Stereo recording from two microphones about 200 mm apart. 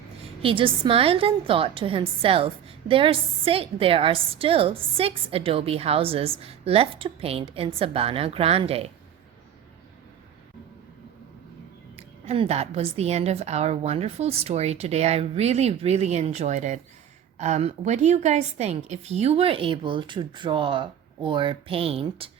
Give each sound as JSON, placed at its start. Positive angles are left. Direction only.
{"t": 0.4, "sound": "a woman's voice", "side_deg": -25}
{"t": 11.9, "sound": "a woman's voice", "side_deg": -30}